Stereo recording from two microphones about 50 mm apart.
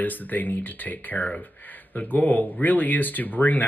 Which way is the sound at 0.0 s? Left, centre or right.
Left.